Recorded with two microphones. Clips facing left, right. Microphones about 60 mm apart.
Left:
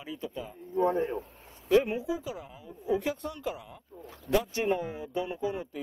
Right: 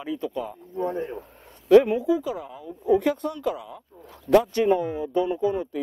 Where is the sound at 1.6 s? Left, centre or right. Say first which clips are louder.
Right 9 dB; right.